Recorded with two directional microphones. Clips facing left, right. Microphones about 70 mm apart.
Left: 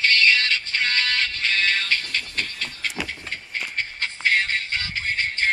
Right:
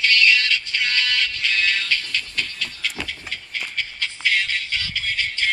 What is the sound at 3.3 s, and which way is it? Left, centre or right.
Shuffle, left.